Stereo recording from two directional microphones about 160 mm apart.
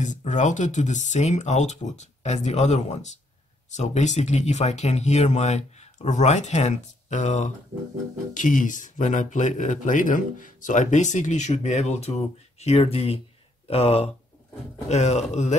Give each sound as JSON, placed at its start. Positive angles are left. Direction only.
{"t": 0.0, "sound": "speech", "side_deg": 50}